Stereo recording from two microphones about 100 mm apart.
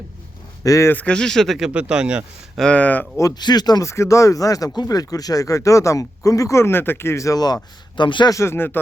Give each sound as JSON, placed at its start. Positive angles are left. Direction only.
{"t": 0.6, "sound": "speech", "side_deg": 35}
{"t": 0.9, "sound": "speech", "side_deg": 15}
{"t": 2.6, "sound": "speech", "side_deg": 10}
{"t": 3.2, "sound": "speech", "side_deg": 40}
{"t": 8.3, "sound": "speech", "side_deg": 30}